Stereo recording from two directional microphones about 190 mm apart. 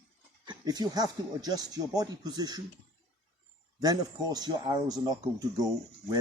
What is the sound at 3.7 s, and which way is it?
Speech, 20° right (ahead or behind).